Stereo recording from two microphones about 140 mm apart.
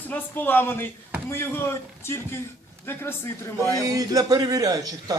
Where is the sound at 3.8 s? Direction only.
25° right (ahead or behind).